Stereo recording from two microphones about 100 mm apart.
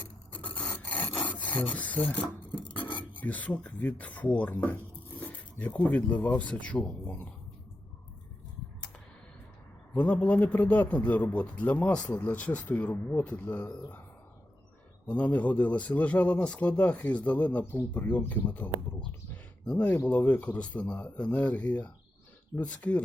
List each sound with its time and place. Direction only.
0.5 s filing: 15° left (ahead or behind)
3.0 s a man's voice: 15° left (ahead or behind)
9.9 s a man's voice: 15° left (ahead or behind)
15.0 s a man's voice: 15° left (ahead or behind)
19.3 s a sound: 15° left (ahead or behind)
20.1 s a man's voice: 15° left (ahead or behind)